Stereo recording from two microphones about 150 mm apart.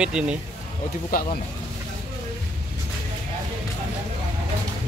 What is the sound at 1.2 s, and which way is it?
Speech, 80° left.